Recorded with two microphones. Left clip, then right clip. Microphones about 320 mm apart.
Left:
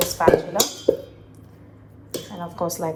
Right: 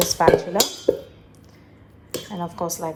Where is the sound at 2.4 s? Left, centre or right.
Centre.